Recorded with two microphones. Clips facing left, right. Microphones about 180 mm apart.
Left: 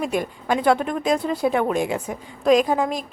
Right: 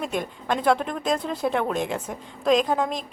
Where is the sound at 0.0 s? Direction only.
5° left (ahead or behind).